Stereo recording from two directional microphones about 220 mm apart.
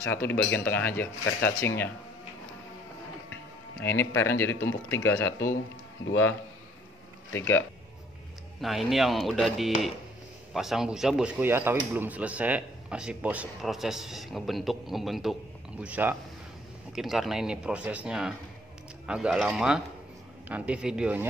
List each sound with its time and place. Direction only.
0.0 s speech: 10° left (ahead or behind)
3.8 s speech: 10° left (ahead or behind)
7.3 s speech: 10° left (ahead or behind)
8.5 s speech: centre (ahead or behind)